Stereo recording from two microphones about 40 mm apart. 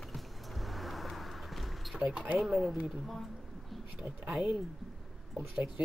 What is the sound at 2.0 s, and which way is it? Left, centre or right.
Speech, right.